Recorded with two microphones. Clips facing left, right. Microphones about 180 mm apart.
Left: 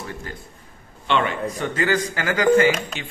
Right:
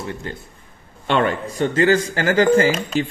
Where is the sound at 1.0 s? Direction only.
45° right (ahead or behind).